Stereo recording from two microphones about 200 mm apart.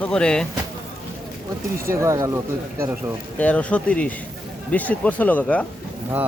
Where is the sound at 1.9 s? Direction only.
15° right (ahead or behind).